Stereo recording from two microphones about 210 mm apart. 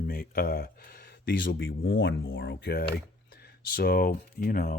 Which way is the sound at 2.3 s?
50° left (ahead or behind).